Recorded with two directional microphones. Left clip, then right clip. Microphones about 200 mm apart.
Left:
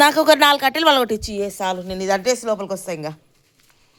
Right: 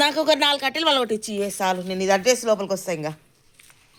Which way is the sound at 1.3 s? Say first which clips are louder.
Left 1 dB; centre (ahead or behind).